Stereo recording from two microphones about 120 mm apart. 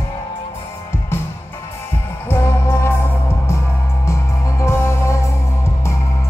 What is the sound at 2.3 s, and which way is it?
Music, 20° left (ahead or behind).